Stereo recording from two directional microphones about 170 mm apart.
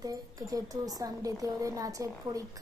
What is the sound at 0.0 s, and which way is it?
A child's voice, 20° right (ahead or behind).